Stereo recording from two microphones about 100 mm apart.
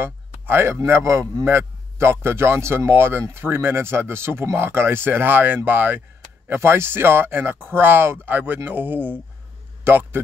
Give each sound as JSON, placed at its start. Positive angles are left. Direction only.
{"t": 0.0, "sound": "a man's voice", "side_deg": -25}